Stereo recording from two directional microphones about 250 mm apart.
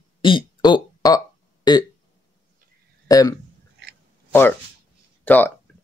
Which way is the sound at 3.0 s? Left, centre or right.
Centre.